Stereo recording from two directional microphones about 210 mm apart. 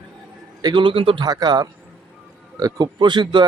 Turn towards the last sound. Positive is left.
turn(degrees=-20)  # may be behind; listen again after turning